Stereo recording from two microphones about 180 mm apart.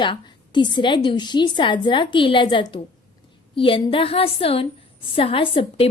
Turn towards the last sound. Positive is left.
turn(degrees=30)  # may be behind; listen again after turning